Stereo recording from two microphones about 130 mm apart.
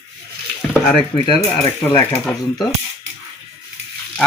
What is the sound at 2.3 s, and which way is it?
Mechanisms, 10° left (ahead or behind).